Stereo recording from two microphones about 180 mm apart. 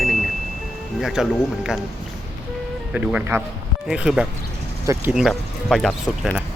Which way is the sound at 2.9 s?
5° right (ahead or behind).